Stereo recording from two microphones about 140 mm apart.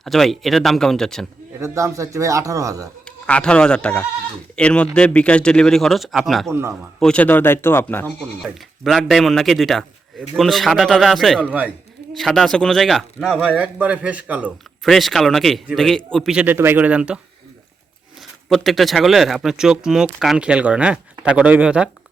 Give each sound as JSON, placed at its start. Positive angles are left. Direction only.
{"t": 0.0, "sound": "speech", "side_deg": 0}
{"t": 1.5, "sound": "a man's voice", "side_deg": -20}
{"t": 3.2, "sound": "speech", "side_deg": 10}
{"t": 6.5, "sound": "a man's voice", "side_deg": -20}
{"t": 7.0, "sound": "speech", "side_deg": 10}
{"t": 8.0, "sound": "speech", "side_deg": 0}
{"t": 11.3, "sound": "a man's voice", "side_deg": -10}
{"t": 12.1, "sound": "a man's voice", "side_deg": 5}
{"t": 14.8, "sound": "a man's voice", "side_deg": 0}
{"t": 18.4, "sound": "speech", "side_deg": 0}